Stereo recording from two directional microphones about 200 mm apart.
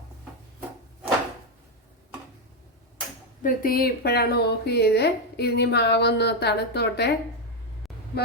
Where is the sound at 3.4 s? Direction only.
45° left (ahead or behind).